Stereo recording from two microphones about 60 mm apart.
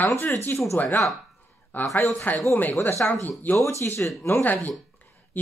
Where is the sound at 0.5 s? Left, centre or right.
Left.